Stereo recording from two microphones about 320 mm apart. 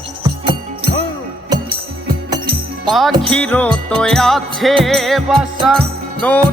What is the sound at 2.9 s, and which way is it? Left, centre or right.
Music, centre.